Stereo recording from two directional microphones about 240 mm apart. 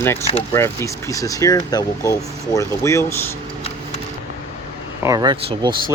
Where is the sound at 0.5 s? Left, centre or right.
Centre.